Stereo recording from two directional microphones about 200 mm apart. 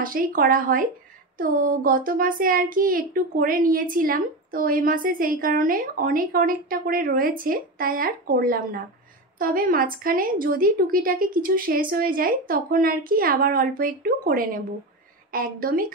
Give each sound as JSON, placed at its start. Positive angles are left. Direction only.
{"t": 0.0, "sound": "a child's voice", "side_deg": -45}